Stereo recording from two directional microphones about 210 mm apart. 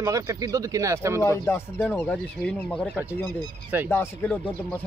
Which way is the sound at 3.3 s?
20° right (ahead or behind).